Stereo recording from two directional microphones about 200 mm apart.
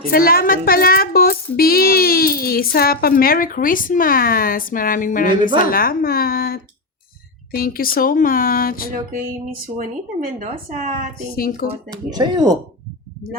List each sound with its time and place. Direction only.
0.1 s speech: 45° left (ahead or behind)
9.7 s speech: 40° right (ahead or behind)
11.3 s speech: 45° left (ahead or behind)
11.9 s speech: 20° right (ahead or behind)